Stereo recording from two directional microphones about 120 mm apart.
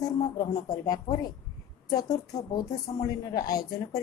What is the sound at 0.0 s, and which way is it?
A woman's voice, 30° left (ahead or behind).